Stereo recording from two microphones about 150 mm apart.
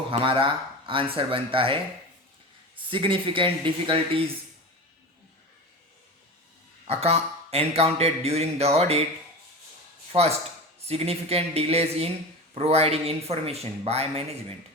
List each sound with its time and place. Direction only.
0.1 s speech: 35° right (ahead or behind)
2.9 s speech: 35° right (ahead or behind)
6.8 s speech: 45° right (ahead or behind)
10.1 s speech: 45° right (ahead or behind)